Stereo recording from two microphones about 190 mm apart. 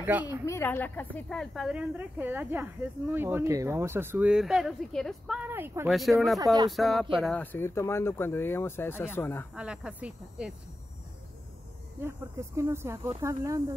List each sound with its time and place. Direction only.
0.0 s speech: 10° right (ahead or behind)
0.5 s a woman's voice: 10° left (ahead or behind)
5.5 s speech: 10° right (ahead or behind)
5.9 s a woman's voice: centre (ahead or behind)
6.4 s speech: 20° right (ahead or behind)
6.7 s a woman's voice: centre (ahead or behind)
7.5 s speech: 15° left (ahead or behind)
9.6 s speech: 5° right (ahead or behind)
12.0 s speech: 10° right (ahead or behind)